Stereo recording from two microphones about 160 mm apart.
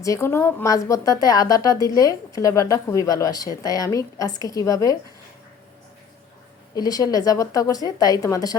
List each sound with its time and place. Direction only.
0.0 s a woman's voice: 20° left (ahead or behind)
6.7 s a woman's voice: 25° left (ahead or behind)